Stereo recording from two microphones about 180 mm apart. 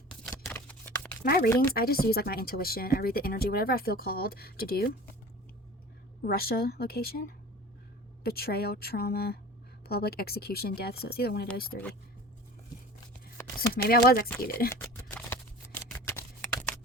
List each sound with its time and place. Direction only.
0.1 s scissors: 5° left (ahead or behind)
0.4 s a sound: 10° left (ahead or behind)
1.2 s speech: 55° left (ahead or behind)
6.2 s speech: 60° left (ahead or behind)
13.8 s speech: 55° left (ahead or behind)
14.7 s scissors: 15° left (ahead or behind)